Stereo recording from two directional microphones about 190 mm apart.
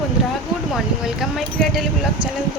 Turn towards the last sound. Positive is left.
turn(degrees=0)  # may be behind; listen again after turning